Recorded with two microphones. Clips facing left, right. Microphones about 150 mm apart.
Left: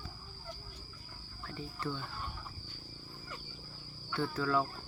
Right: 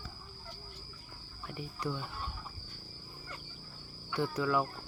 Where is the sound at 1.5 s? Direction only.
15° right (ahead or behind).